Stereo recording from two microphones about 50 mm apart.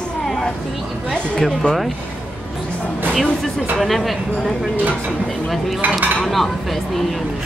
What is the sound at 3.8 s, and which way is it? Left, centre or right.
Speech, centre.